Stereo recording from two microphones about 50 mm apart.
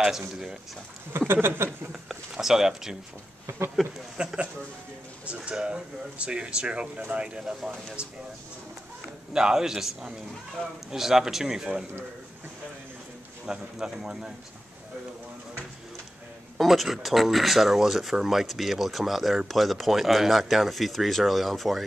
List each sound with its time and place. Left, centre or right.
1.1 s speech: right
2.3 s a man's voice: centre
3.4 s speech: right
4.2 s a man's voice: centre
9.3 s a man's voice: centre
13.5 s a man's voice: centre
16.5 s speech: centre